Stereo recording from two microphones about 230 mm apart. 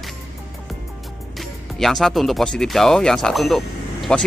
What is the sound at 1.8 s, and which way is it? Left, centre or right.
Speech, centre.